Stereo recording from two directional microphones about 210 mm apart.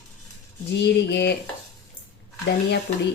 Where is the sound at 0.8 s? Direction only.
55° left (ahead or behind).